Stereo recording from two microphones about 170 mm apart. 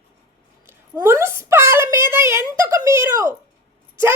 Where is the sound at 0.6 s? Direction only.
15° right (ahead or behind).